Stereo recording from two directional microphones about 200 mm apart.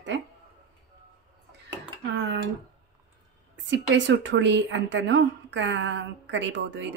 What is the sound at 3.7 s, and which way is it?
A woman's voice, 65° right (ahead or behind).